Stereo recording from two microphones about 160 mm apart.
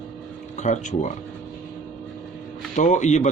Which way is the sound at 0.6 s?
50° left (ahead or behind).